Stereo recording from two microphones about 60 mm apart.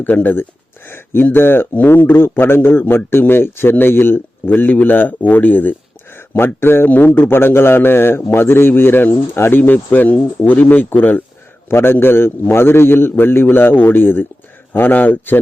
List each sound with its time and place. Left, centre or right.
0.0 s a man's voice: left
6.8 s a man's voice: left
11.7 s a man's voice: left